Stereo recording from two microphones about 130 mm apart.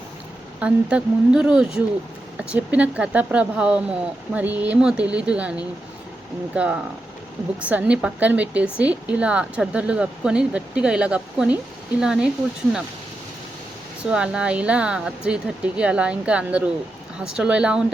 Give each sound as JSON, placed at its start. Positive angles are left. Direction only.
{"t": 0.6, "sound": "speech", "side_deg": -10}
{"t": 14.0, "sound": "speech", "side_deg": -5}